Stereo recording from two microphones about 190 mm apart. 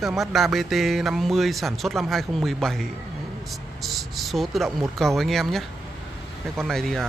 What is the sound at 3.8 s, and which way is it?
Speech, centre (ahead or behind).